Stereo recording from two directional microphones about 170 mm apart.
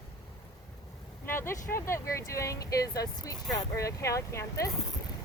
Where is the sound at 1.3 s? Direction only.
15° left (ahead or behind).